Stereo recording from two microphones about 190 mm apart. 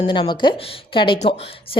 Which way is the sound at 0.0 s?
25° left (ahead or behind).